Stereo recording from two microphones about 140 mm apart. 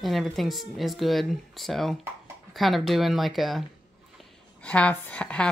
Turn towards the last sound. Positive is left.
turn(degrees=10)  # may be behind; listen again after turning